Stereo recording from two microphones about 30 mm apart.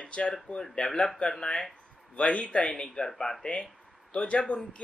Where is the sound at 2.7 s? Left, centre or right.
Left.